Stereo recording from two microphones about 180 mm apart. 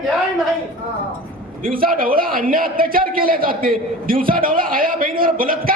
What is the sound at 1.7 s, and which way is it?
A man's voice, 50° right (ahead or behind).